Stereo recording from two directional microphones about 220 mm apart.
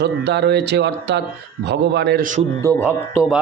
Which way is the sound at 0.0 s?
50° right (ahead or behind).